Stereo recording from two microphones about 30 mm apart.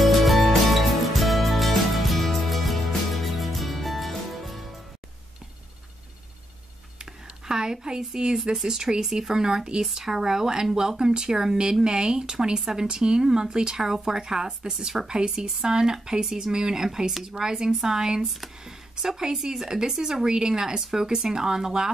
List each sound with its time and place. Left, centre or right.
0.0 s music: centre
7.0 s a sound: right
8.6 s speech: centre
9.3 s speech: right